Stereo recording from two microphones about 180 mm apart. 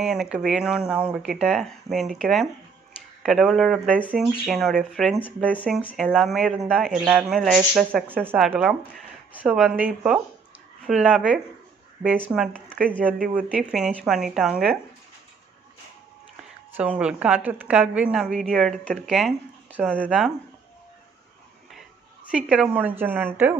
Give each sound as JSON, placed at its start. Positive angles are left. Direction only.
{"t": 0.0, "sound": "a woman's voice", "side_deg": 0}
{"t": 8.2, "sound": "a woman's voice", "side_deg": -10}
{"t": 13.3, "sound": "a woman's voice", "side_deg": -5}
{"t": 16.7, "sound": "a woman's voice", "side_deg": -10}
{"t": 22.3, "sound": "speech", "side_deg": -5}